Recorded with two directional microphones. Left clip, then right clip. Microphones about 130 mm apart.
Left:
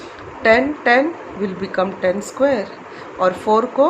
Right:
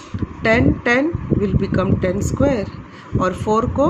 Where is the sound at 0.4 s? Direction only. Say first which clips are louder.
Left 2 dB; 40° right (ahead or behind).